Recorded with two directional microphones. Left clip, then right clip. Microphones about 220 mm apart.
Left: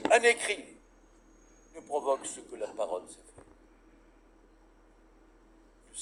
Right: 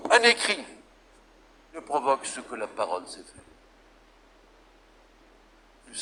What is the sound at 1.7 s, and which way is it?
A man's voice, 35° right (ahead or behind).